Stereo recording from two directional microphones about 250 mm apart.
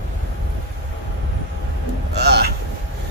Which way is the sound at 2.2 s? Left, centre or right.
Right.